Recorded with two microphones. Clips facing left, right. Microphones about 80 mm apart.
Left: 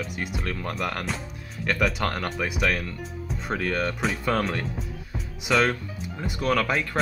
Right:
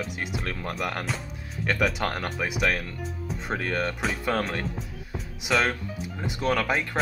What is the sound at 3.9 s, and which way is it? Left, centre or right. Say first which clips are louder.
Speech: left 2 dB; centre.